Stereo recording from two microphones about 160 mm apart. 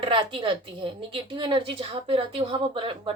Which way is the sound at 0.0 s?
30° right (ahead or behind).